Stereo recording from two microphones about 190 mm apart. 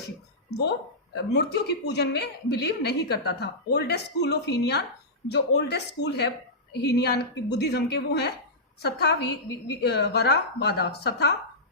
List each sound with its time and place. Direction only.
0.5 s a woman's voice: 60° left (ahead or behind)